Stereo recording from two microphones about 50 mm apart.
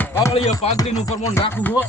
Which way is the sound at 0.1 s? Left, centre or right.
Left.